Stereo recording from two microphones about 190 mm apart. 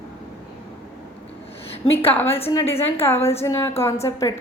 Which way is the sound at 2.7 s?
10° left (ahead or behind).